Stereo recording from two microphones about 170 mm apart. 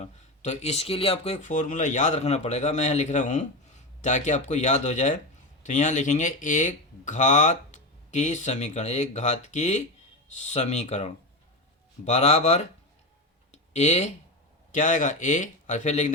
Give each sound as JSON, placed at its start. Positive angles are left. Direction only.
{"t": 0.0, "sound": "speech", "side_deg": 40}
{"t": 13.5, "sound": "clicking", "side_deg": 40}
{"t": 14.7, "sound": "speech", "side_deg": 50}